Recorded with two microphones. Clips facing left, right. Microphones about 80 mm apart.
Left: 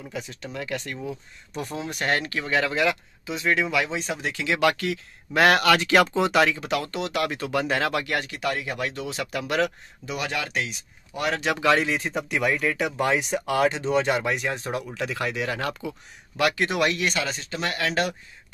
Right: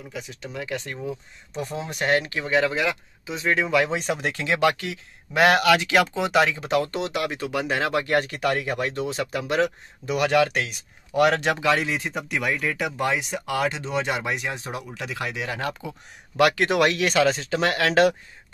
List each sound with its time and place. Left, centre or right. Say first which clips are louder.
0.1 s speech: even; centre
3.3 s speech: even; right
3.9 s speech: right 3 dB; right
4.6 s speech: left 1 dB; right
7.9 s speech: right 4 dB; right
10.0 s speech: right 9 dB; right
11.6 s speech: left 1 dB; centre
14.1 s speech: left 2 dB; centre
16.3 s speech: right 4 dB; right
17.6 s speech: right 5 dB; right